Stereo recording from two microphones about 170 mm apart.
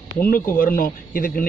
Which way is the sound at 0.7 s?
55° left (ahead or behind).